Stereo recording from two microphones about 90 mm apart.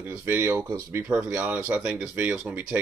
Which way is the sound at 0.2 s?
25° right (ahead or behind).